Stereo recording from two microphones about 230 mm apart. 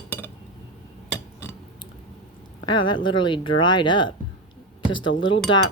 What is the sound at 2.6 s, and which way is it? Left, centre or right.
Speech, centre.